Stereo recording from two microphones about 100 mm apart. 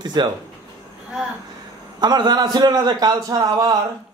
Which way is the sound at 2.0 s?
45° right (ahead or behind).